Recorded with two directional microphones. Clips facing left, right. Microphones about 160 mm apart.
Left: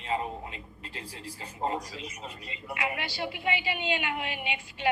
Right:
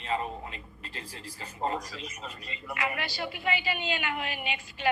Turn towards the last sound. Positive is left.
turn(degrees=20)  # may be behind; listen again after turning